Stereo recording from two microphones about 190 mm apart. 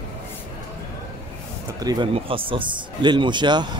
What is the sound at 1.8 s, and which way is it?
Speech, 20° right (ahead or behind).